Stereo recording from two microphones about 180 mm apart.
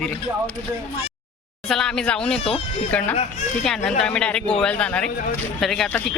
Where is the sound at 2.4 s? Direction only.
35° left (ahead or behind).